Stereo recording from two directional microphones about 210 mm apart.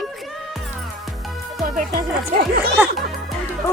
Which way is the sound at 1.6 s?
40° right (ahead or behind).